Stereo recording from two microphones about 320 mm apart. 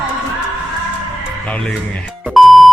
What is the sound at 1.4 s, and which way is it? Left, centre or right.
Speech, centre.